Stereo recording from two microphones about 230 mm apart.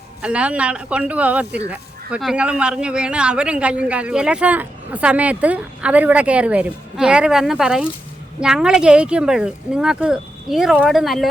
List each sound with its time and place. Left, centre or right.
0.2 s speech: centre